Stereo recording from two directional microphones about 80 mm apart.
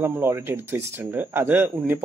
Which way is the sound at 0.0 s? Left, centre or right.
Right.